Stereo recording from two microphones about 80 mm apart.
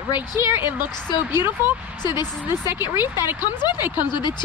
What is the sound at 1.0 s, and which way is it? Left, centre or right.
Speech, left.